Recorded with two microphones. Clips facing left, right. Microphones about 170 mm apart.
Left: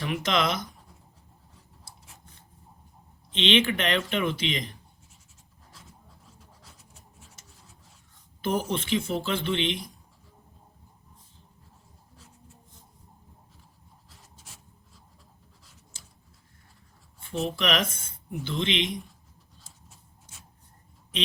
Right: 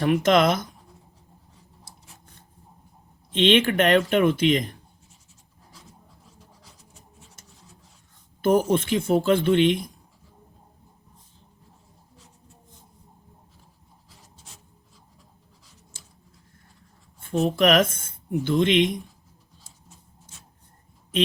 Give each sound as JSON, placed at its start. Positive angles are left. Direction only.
{"t": 0.0, "sound": "speech", "side_deg": -50}
{"t": 3.3, "sound": "speech", "side_deg": -50}
{"t": 7.4, "sound": "rub", "side_deg": -50}
{"t": 8.4, "sound": "speech", "side_deg": -50}
{"t": 17.2, "sound": "a sound", "side_deg": -45}
{"t": 17.6, "sound": "speech", "side_deg": -50}